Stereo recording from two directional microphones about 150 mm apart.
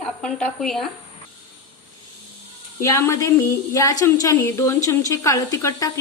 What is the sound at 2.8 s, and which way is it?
A woman's voice, 20° left (ahead or behind).